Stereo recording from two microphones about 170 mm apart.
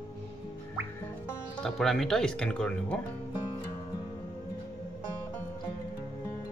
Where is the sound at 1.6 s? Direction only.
Centre (ahead or behind).